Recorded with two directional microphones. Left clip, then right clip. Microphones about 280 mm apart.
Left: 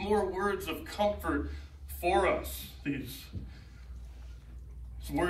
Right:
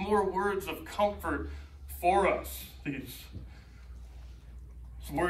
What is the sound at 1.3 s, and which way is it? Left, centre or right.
Speech, right.